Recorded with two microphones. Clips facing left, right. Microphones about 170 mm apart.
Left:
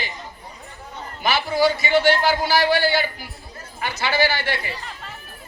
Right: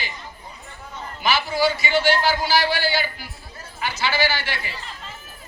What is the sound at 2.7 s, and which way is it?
Speech, 55° left (ahead or behind).